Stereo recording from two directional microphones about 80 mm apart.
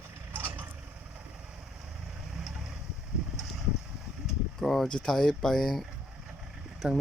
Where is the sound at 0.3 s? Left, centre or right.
Right.